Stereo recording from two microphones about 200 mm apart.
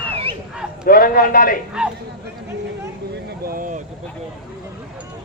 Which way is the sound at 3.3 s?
45° right (ahead or behind).